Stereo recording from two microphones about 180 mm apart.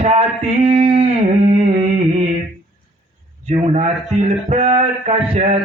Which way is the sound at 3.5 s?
35° right (ahead or behind).